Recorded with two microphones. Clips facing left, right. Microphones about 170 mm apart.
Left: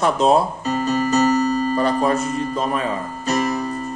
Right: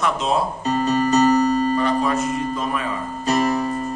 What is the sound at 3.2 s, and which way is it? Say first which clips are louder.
Music: right 2 dB; 35° right (ahead or behind).